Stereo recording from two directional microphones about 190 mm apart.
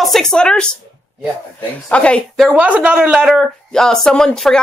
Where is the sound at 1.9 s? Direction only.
5° left (ahead or behind).